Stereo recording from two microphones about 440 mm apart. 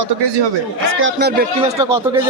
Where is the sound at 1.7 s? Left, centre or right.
Centre.